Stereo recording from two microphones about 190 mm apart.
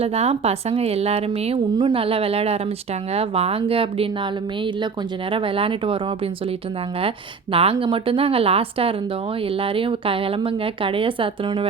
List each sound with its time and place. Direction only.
0.0 s a woman's voice: 35° right (ahead or behind)
5.3 s speech: 30° right (ahead or behind)
7.5 s speech: 30° right (ahead or behind)